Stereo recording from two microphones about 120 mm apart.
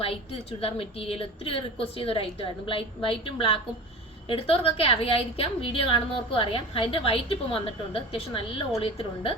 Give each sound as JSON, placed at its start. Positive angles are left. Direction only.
{"t": 0.6, "sound": "a woman's voice", "side_deg": 50}